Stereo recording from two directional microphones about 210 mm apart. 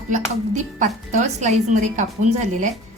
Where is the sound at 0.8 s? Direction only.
35° right (ahead or behind).